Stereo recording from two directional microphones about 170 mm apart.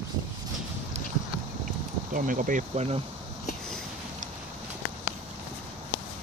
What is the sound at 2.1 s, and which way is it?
Speech, 55° right (ahead or behind).